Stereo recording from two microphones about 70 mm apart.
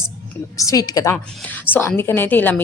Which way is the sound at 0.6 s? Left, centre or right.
Left.